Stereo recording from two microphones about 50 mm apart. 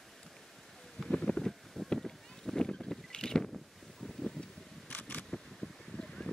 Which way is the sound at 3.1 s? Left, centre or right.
Centre.